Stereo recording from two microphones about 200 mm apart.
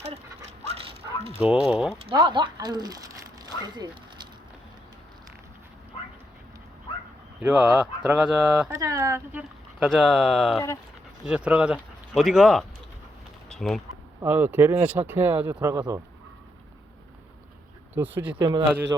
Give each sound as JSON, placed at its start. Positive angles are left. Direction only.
{"t": 0.3, "sound": "dog", "side_deg": -25}
{"t": 1.4, "sound": "speech", "side_deg": -5}
{"t": 2.1, "sound": "speech", "side_deg": -20}
{"t": 7.3, "sound": "speech", "side_deg": -5}
{"t": 8.7, "sound": "speech", "side_deg": -15}
{"t": 9.4, "sound": "speech", "side_deg": 0}
{"t": 14.2, "sound": "speech", "side_deg": -10}
{"t": 18.1, "sound": "speech", "side_deg": -60}
{"t": 18.3, "sound": "speech", "side_deg": -25}